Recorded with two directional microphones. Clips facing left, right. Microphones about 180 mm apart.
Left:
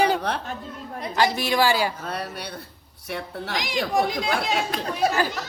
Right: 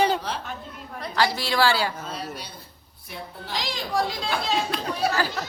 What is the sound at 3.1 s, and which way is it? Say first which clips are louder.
Speech: left 5 dB; 75° left (ahead or behind).